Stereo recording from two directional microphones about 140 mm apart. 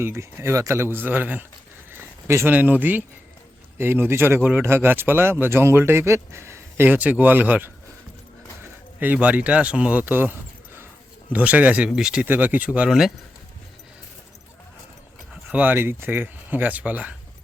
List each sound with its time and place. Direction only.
0.0 s speech: 15° right (ahead or behind)
9.0 s speech: 10° right (ahead or behind)
15.4 s speech: 15° right (ahead or behind)